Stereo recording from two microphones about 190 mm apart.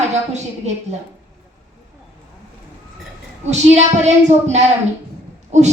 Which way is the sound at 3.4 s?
35° right (ahead or behind).